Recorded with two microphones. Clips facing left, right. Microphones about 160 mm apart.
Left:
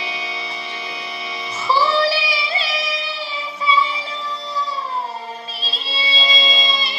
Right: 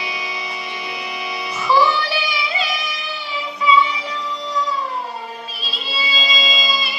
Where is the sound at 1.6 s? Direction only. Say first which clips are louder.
Even; 30° left (ahead or behind).